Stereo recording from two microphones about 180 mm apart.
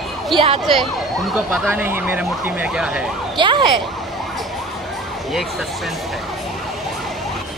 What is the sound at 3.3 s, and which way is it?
Speech, 25° right (ahead or behind).